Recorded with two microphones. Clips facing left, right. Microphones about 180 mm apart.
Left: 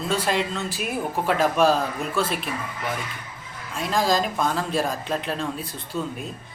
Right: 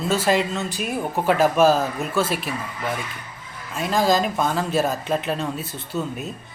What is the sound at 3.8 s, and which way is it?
Speech, centre (ahead or behind).